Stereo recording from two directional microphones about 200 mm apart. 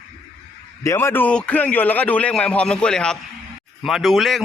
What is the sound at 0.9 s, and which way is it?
A man's voice, 10° left (ahead or behind).